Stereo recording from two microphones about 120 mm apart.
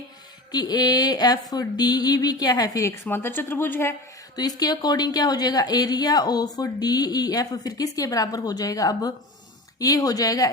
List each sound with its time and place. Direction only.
0.5 s a woman's voice: 35° left (ahead or behind)
3.0 s speech: 20° left (ahead or behind)
4.4 s a woman's voice: 35° left (ahead or behind)